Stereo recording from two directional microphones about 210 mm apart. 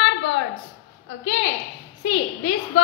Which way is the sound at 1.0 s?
55° left (ahead or behind).